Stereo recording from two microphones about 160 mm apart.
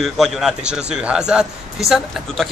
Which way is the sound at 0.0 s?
Centre (ahead or behind).